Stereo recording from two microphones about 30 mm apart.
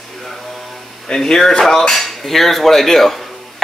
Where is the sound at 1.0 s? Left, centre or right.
Centre.